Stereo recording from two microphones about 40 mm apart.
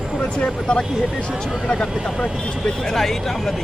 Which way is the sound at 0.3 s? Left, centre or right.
Left.